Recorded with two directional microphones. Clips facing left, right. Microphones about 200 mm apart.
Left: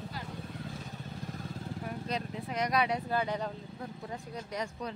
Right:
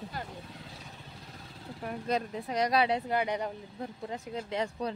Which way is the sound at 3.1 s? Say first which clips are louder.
Right 2 dB; 15° right (ahead or behind).